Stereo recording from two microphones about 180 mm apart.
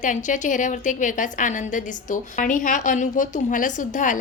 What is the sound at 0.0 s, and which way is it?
A woman's voice, 45° left (ahead or behind).